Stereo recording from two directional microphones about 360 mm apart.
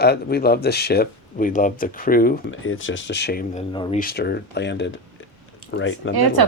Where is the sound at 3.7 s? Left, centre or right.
Centre; by 6.1 s left.